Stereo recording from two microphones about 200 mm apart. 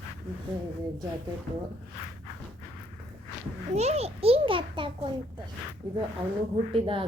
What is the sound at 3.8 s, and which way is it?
A child's voice, 30° right (ahead or behind).